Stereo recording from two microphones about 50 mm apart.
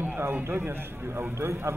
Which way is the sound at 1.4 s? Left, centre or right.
Right.